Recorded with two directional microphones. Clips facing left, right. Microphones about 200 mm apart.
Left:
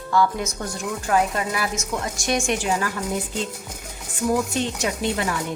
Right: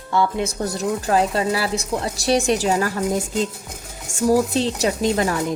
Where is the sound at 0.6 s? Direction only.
35° right (ahead or behind).